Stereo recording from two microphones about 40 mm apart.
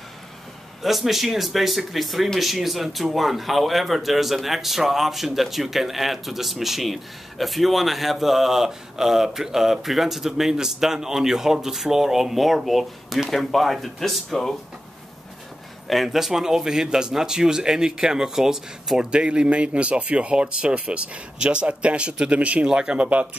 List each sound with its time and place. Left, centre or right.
0.8 s speech: centre
15.9 s a man's voice: centre
19.0 s speech: right
22.7 s speech: right